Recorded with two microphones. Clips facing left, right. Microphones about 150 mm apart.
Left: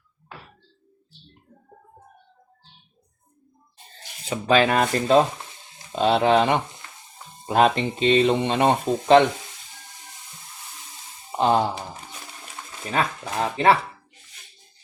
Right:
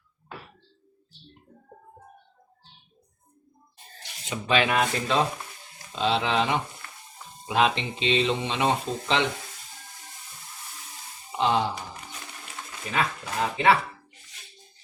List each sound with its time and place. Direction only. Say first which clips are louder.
3.9 s speech: left 5 dB; 40° left (ahead or behind)
11.3 s music: left 4 dB; 45° left (ahead or behind)
12.9 s speech: left 3 dB; 35° left (ahead or behind)